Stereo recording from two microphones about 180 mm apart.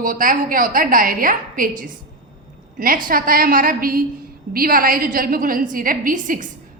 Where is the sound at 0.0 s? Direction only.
50° right (ahead or behind).